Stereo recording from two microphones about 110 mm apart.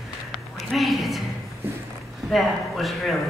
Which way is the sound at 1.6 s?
20° right (ahead or behind).